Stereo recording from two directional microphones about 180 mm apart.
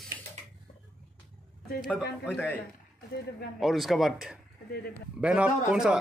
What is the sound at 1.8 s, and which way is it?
Speech, 5° left (ahead or behind).